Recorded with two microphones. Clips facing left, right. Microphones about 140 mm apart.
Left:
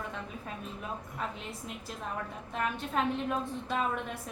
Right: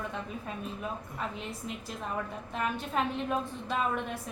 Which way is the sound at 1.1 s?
Centre (ahead or behind).